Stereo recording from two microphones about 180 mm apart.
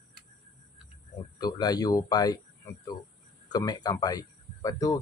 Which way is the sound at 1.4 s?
20° left (ahead or behind).